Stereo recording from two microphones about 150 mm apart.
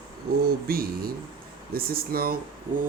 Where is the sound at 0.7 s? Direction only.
80° right.